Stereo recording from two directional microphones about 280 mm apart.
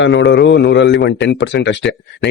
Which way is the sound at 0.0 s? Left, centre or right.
Left.